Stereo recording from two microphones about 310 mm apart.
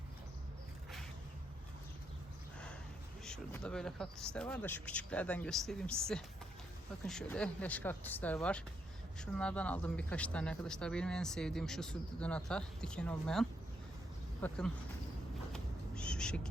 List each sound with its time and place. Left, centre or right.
3.2 s speech: centre
15.5 s owl: centre